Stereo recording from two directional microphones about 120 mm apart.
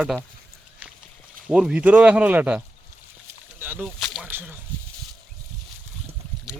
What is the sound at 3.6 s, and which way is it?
Rowboat, 15° right (ahead or behind).